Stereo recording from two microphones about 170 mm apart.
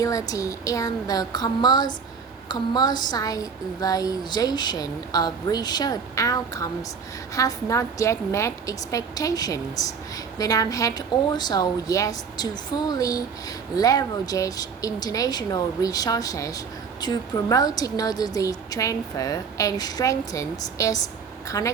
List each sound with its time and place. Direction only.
0.0 s speech: 20° left (ahead or behind)